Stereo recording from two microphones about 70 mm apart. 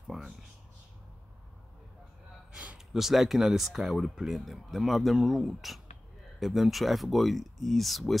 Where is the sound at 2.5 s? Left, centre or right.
Centre.